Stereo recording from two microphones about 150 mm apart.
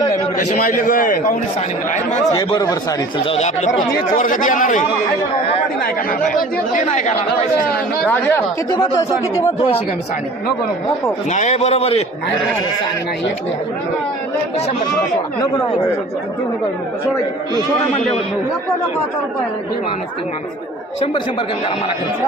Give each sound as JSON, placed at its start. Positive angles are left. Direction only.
{"t": 0.3, "sound": "speech", "side_deg": 60}
{"t": 2.3, "sound": "speech", "side_deg": 25}
{"t": 3.2, "sound": "a man's voice", "side_deg": 45}
{"t": 4.1, "sound": "speech", "side_deg": 60}
{"t": 5.8, "sound": "speech", "side_deg": 70}
{"t": 8.0, "sound": "speech", "side_deg": 10}
{"t": 8.7, "sound": "speech", "side_deg": 25}
{"t": 11.3, "sound": "a man's voice", "side_deg": 50}